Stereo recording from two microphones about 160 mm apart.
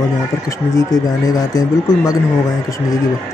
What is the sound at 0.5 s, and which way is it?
Speech, 20° left (ahead or behind).